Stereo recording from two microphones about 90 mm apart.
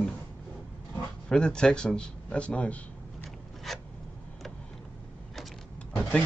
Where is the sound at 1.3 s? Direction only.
10° left (ahead or behind).